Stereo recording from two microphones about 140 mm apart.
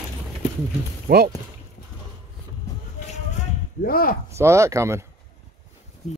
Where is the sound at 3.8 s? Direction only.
90° left.